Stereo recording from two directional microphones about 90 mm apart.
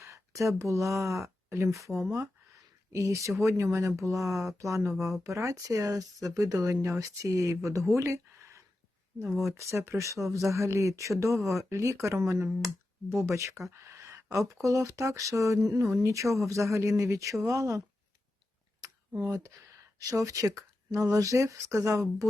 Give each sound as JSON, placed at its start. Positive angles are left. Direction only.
{"t": 0.0, "sound": "speech", "side_deg": -35}
{"t": 1.9, "sound": "speech", "side_deg": 0}
{"t": 2.9, "sound": "speech", "side_deg": -35}
{"t": 18.8, "sound": "a sound", "side_deg": -35}
{"t": 20.0, "sound": "speech", "side_deg": -40}